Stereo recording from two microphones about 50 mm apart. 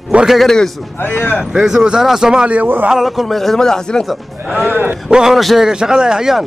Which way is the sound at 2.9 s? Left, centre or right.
Centre.